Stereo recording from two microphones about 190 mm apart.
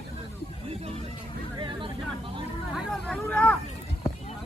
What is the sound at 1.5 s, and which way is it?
Vehicle, 25° right (ahead or behind).